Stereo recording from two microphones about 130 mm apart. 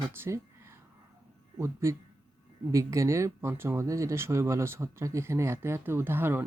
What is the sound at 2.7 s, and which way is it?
Speech, 25° right (ahead or behind).